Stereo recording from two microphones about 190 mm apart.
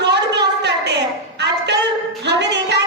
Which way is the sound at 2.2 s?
65° right (ahead or behind).